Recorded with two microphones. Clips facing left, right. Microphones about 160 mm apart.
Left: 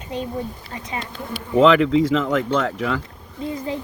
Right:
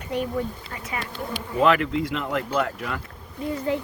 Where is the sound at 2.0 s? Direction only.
90° left.